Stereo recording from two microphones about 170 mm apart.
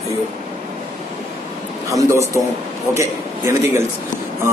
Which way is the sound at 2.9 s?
20° right (ahead or behind).